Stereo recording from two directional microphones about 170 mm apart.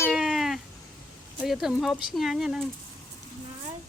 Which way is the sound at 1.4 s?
Centre (ahead or behind).